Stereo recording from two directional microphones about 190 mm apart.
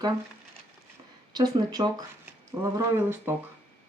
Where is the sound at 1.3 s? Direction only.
20° right (ahead or behind).